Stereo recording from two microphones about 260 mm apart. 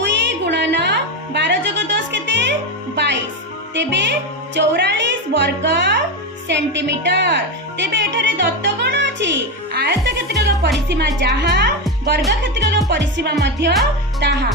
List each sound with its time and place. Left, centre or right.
0.0 s music: right
3.8 s a woman's voice: right